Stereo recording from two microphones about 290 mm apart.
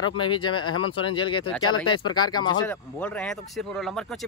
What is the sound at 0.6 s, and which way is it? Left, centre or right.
Speech, left.